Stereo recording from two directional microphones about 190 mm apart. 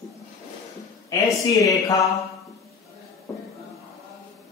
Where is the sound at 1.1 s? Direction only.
20° left (ahead or behind).